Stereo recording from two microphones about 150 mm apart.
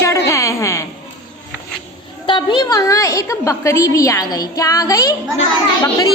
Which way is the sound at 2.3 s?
30° left (ahead or behind).